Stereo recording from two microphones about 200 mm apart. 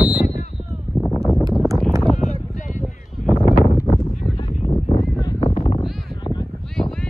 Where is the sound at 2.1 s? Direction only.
40° left (ahead or behind).